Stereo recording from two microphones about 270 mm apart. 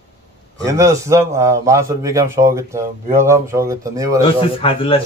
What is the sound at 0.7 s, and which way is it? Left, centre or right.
A man's voice, centre.